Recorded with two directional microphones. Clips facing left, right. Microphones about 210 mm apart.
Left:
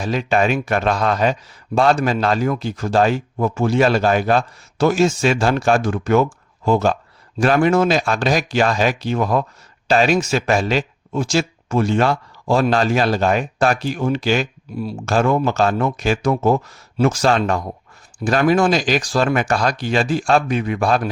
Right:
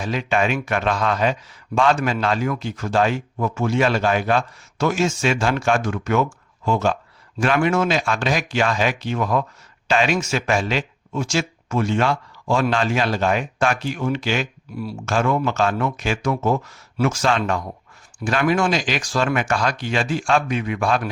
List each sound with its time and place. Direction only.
0.0 s speech: 40° left (ahead or behind)
14.8 s speech: 25° left (ahead or behind)
15.0 s speech: 35° left (ahead or behind)